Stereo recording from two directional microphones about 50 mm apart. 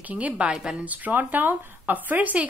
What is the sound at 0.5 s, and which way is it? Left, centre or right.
Speech, centre.